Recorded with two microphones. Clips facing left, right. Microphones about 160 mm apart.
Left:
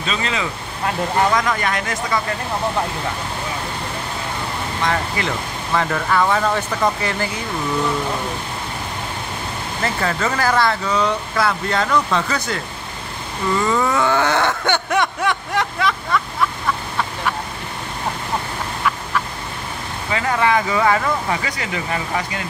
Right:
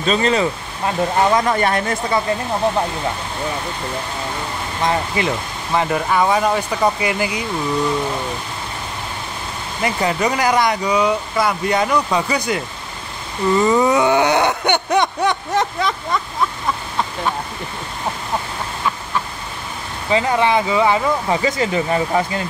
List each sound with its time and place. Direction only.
0.0 s speech: 40° right (ahead or behind)
0.8 s speech: 30° right (ahead or behind)
4.8 s speech: 20° right (ahead or behind)
9.8 s speech: 15° right (ahead or behind)
20.1 s speech: 20° right (ahead or behind)